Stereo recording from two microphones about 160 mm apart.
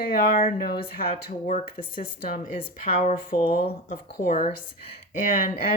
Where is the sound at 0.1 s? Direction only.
60° left (ahead or behind).